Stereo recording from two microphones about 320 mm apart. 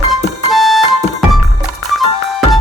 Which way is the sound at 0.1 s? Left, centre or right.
Centre.